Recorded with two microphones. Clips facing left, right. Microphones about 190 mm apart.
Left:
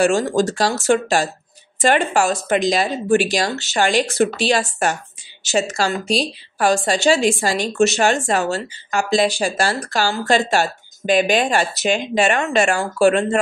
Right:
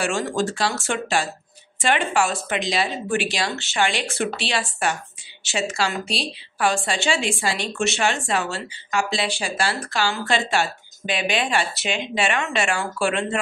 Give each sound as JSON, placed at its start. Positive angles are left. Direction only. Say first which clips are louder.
{"t": 0.0, "sound": "a woman's voice", "louder": "left 7 dB", "side_deg": 40}